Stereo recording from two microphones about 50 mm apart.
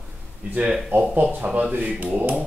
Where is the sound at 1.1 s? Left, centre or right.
Right.